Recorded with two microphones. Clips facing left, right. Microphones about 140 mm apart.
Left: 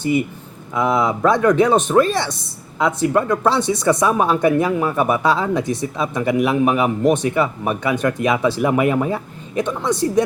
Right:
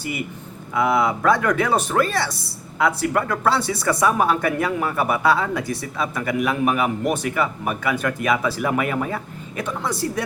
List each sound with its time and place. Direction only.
0.8 s speech: 20° left (ahead or behind)